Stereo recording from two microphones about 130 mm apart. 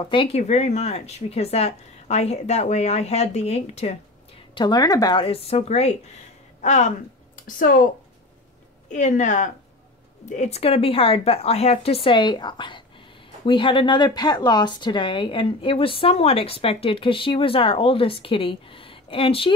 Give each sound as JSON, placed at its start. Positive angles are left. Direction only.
{"t": 0.1, "sound": "speech", "side_deg": 40}
{"t": 0.4, "sound": "a woman's voice", "side_deg": 60}
{"t": 4.6, "sound": "speech", "side_deg": 30}
{"t": 5.2, "sound": "a woman's voice", "side_deg": 45}
{"t": 7.3, "sound": "a woman's voice", "side_deg": 90}
{"t": 8.8, "sound": "speech", "side_deg": 70}